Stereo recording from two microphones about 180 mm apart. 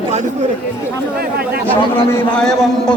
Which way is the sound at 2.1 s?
5° left (ahead or behind).